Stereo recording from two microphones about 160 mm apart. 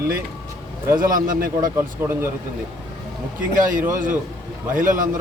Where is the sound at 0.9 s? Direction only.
60° right (ahead or behind).